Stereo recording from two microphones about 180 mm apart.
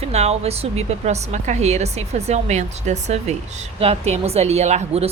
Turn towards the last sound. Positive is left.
turn(degrees=-35)  # may be behind; listen again after turning